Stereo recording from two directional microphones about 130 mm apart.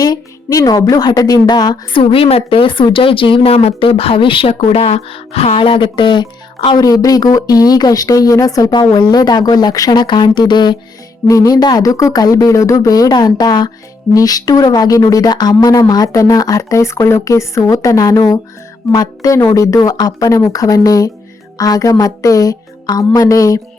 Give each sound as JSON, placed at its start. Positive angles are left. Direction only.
{"t": 0.0, "sound": "speech", "side_deg": 30}
{"t": 2.0, "sound": "a woman's voice", "side_deg": 45}